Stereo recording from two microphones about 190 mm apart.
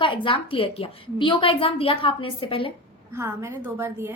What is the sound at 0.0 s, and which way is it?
A woman's voice, 25° left (ahead or behind).